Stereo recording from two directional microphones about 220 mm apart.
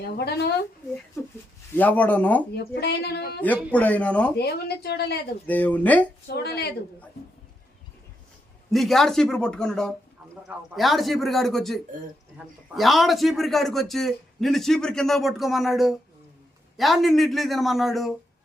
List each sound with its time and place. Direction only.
0.0 s a woman's voice: 45° left (ahead or behind)
1.7 s speech: 10° left (ahead or behind)
2.6 s a woman's voice: 45° left (ahead or behind)
3.4 s speech: 5° left (ahead or behind)
4.4 s a woman's voice: 50° left (ahead or behind)
5.5 s speech: 5° left (ahead or behind)
6.2 s a woman's voice: 45° left (ahead or behind)
8.7 s a man's voice: centre (ahead or behind)